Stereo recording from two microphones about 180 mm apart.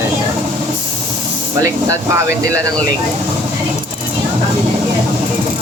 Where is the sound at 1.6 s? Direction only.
15° right (ahead or behind).